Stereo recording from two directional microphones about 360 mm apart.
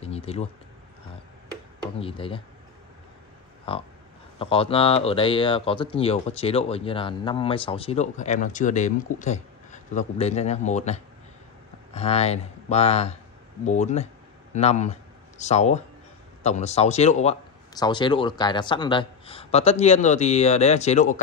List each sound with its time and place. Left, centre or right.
0.0 s a sound: centre
2.0 s speech: centre
3.7 s speech: centre